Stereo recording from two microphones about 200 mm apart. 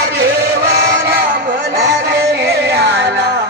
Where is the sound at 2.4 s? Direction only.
55° right (ahead or behind).